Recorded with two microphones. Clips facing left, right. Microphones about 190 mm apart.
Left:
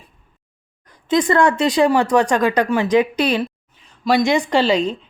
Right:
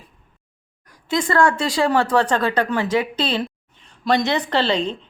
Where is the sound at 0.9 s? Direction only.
20° left (ahead or behind).